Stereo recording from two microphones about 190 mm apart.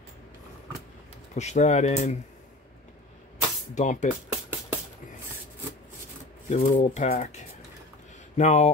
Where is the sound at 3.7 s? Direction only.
40° left (ahead or behind).